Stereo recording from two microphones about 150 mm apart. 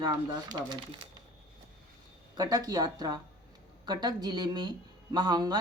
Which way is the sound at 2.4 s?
25° right (ahead or behind).